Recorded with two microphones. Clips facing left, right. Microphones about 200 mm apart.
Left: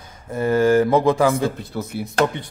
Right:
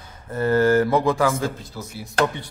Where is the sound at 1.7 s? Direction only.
60° left (ahead or behind).